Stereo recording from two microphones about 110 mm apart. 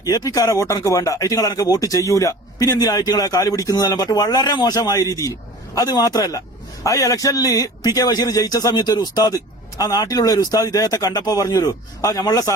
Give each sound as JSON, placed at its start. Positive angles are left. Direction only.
{"t": 0.0, "sound": "a man's voice", "side_deg": 35}